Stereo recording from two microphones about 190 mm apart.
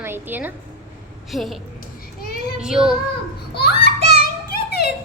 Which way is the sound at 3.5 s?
60° left (ahead or behind).